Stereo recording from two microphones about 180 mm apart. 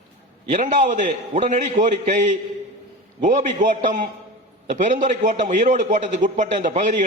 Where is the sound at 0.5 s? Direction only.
45° right (ahead or behind).